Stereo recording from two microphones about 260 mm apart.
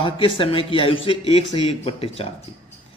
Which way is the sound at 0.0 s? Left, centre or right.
Centre.